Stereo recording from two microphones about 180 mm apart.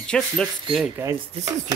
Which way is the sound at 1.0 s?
15° right (ahead or behind).